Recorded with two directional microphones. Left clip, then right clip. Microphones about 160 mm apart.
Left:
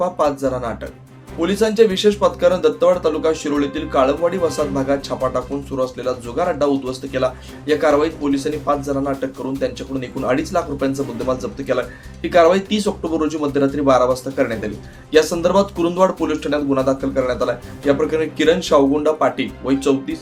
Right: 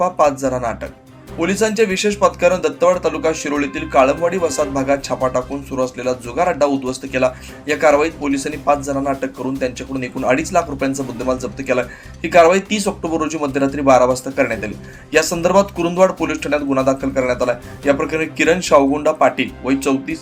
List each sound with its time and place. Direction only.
0.0 s speech: 15° right (ahead or behind)